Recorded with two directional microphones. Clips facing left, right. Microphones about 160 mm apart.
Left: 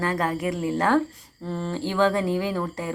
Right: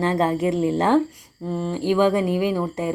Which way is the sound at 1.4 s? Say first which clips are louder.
Right 6 dB; 10° right (ahead or behind).